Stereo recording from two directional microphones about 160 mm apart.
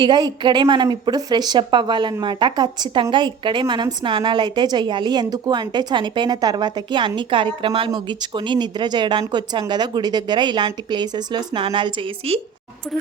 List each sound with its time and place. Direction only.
0.0 s a woman's voice: 25° right (ahead or behind)